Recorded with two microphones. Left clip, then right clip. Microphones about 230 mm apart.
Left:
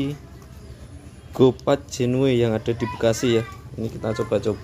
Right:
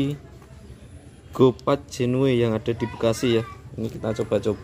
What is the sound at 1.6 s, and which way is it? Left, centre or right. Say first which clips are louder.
Speech: left 2 dB; centre.